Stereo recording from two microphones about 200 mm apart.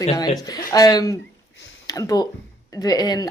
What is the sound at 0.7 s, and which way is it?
A woman's voice, 20° left (ahead or behind).